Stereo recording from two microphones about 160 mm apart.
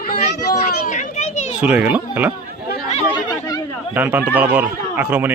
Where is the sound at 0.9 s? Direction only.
50° left (ahead or behind).